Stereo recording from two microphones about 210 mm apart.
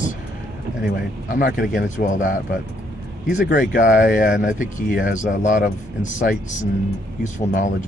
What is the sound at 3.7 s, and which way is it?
Speech, 40° left (ahead or behind).